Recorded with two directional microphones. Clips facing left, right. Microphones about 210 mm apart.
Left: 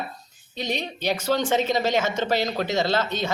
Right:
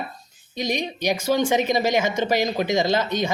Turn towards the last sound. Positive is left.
turn(degrees=-15)  # may be behind; listen again after turning